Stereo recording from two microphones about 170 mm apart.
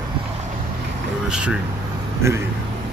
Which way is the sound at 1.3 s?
5° right (ahead or behind).